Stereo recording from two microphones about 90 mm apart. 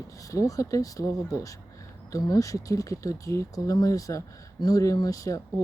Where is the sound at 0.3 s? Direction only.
40° left (ahead or behind).